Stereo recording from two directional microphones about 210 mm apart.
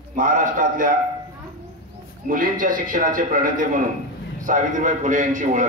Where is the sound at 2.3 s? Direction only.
40° right (ahead or behind).